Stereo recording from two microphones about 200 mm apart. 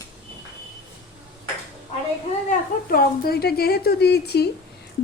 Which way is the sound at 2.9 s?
50° left (ahead or behind).